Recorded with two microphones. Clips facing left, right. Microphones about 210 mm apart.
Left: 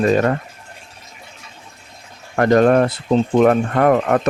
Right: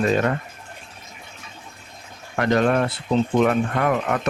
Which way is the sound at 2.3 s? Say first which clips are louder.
Left 6 dB; 45° left (ahead or behind).